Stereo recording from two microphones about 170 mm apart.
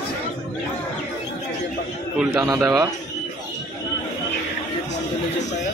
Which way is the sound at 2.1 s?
5° right (ahead or behind).